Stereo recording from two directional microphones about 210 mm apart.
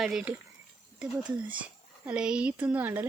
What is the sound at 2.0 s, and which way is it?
Speech, 5° right (ahead or behind).